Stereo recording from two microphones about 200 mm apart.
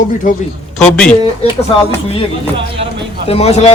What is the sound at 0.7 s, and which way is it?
Speech, 5° left (ahead or behind).